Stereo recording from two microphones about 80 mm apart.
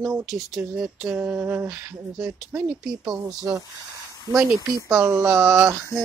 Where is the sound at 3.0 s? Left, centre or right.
Right.